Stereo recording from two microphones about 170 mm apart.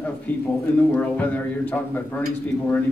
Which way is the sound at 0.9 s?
10° left (ahead or behind).